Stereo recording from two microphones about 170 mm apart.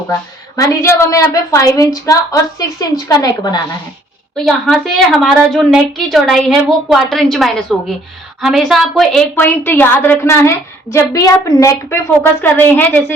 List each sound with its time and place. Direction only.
0.5 s a woman's voice: 20° left (ahead or behind)
4.4 s a woman's voice: centre (ahead or behind)
9.3 s a woman's voice: 10° left (ahead or behind)